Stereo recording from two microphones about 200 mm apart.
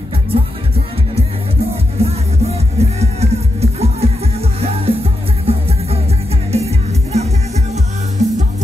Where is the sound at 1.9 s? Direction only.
30° right (ahead or behind).